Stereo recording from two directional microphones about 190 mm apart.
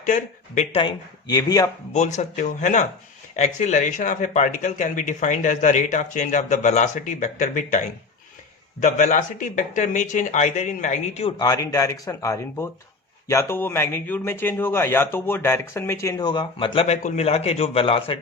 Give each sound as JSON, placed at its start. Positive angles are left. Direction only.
{"t": 0.0, "sound": "speech", "side_deg": 40}
{"t": 1.9, "sound": "a man's voice", "side_deg": 40}